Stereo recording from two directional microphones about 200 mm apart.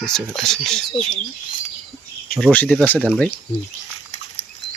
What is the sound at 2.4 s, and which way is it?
Speech, 5° left (ahead or behind).